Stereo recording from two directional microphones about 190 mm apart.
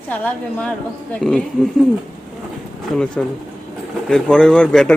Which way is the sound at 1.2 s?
5° left (ahead or behind).